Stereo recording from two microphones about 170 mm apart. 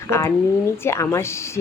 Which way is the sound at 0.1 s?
15° left (ahead or behind).